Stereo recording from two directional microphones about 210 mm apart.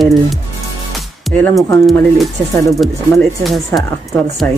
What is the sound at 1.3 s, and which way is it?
Speech, centre (ahead or behind).